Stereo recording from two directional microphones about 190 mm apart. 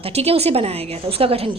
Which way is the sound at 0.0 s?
30° right (ahead or behind).